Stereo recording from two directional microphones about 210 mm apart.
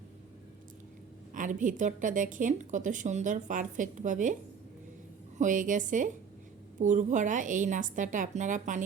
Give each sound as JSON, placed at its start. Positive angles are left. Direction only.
{"t": 1.3, "sound": "a woman's voice", "side_deg": -35}
{"t": 5.4, "sound": "a woman's voice", "side_deg": -40}